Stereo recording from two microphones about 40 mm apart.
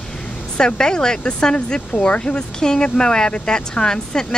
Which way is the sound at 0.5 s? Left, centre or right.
Centre.